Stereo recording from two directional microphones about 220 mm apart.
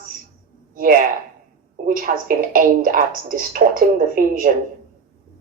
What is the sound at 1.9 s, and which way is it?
Speech, 40° right (ahead or behind).